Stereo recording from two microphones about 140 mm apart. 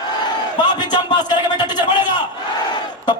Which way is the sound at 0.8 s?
30° left (ahead or behind).